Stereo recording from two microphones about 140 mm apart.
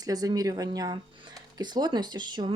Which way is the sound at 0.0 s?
25° right (ahead or behind).